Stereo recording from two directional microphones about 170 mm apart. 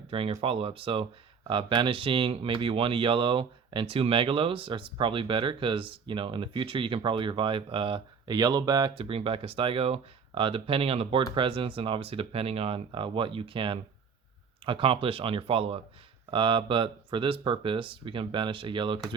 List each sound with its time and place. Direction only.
0.1 s speech: 30° right (ahead or behind)